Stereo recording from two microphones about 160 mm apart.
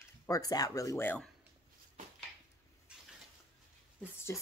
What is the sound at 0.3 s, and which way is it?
Speech, 25° left (ahead or behind).